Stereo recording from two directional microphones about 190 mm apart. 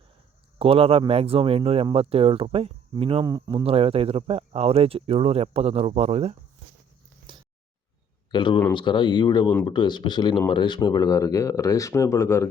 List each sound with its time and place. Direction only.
0.6 s speech: 30° right (ahead or behind)
7.3 s a sound: 25° right (ahead or behind)
8.3 s speech: 25° left (ahead or behind)